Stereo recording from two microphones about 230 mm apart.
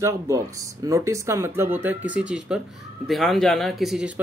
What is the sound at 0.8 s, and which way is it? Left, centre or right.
A man's voice, centre.